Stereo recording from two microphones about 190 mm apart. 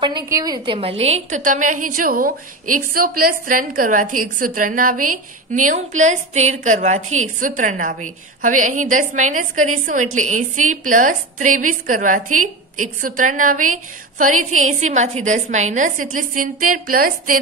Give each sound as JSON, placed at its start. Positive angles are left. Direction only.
{"t": 0.0, "sound": "a woman's voice", "side_deg": -20}
{"t": 0.7, "sound": "a woman's voice", "side_deg": -30}